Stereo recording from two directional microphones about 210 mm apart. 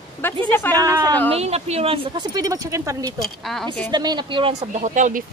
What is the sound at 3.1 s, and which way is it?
Speech, centre (ahead or behind).